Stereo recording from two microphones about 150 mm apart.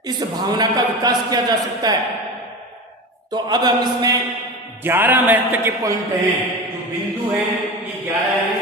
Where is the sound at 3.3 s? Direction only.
25° right (ahead or behind).